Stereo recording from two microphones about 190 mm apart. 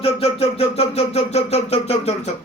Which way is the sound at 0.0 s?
30° left (ahead or behind).